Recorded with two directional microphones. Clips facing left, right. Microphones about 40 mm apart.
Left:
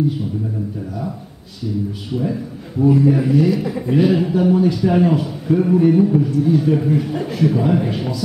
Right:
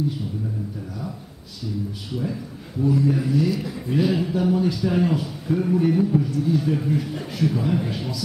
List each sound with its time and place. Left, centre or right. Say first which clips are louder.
2.8 s a man's voice: left 7 dB; left